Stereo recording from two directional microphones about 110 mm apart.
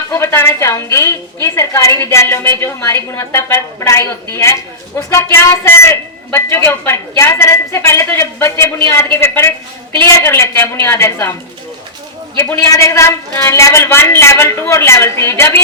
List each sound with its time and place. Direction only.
0.1 s a woman's voice: 25° left (ahead or behind)
12.5 s a woman's voice: 30° left (ahead or behind)